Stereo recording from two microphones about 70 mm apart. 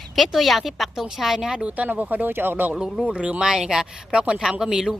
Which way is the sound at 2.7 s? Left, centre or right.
Centre.